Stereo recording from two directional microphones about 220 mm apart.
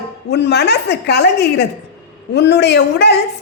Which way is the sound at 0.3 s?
50° left (ahead or behind).